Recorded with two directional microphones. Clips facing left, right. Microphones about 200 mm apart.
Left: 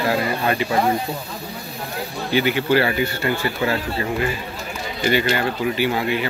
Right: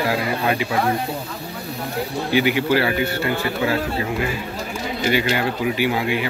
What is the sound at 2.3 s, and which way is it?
A man's voice, 10° right (ahead or behind).